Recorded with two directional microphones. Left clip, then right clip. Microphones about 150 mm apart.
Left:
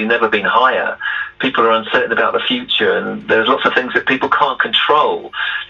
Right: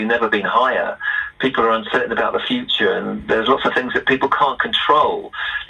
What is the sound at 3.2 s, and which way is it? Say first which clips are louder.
A man's voice: left 3 dB; 30° right (ahead or behind).